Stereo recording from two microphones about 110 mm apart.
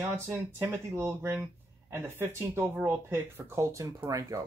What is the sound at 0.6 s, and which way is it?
Speech, 25° right (ahead or behind).